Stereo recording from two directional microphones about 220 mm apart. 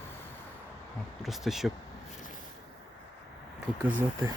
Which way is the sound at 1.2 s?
Centre (ahead or behind).